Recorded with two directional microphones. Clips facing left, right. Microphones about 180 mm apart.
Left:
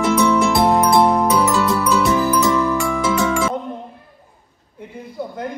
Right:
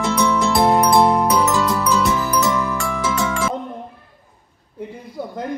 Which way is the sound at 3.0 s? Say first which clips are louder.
Left 2 dB; 15° left (ahead or behind).